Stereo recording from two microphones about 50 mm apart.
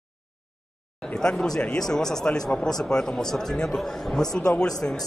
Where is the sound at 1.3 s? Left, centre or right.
Centre.